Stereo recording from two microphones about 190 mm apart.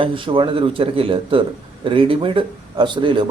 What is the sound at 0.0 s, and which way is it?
Speech, 25° right (ahead or behind).